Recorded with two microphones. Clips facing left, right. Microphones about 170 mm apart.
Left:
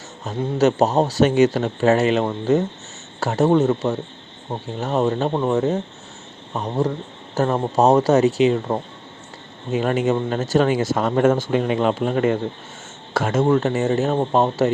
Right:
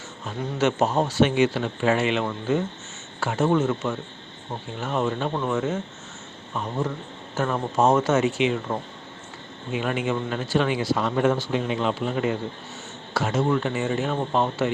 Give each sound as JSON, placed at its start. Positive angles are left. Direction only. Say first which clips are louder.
{"t": 0.3, "sound": "speech", "louder": "left 6 dB", "side_deg": 40}